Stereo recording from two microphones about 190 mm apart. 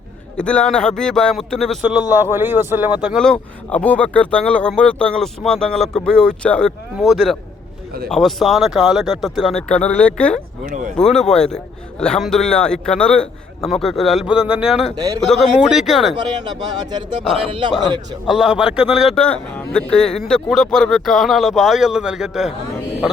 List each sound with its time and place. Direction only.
0.3 s a man's voice: 5° left (ahead or behind)
2.1 s a man's voice: 10° right (ahead or behind)
17.5 s a man's voice: 25° right (ahead or behind)
18.3 s a man's voice: centre (ahead or behind)